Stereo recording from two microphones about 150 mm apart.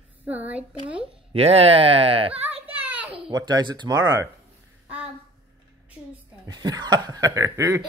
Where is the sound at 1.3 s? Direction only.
40° right (ahead or behind).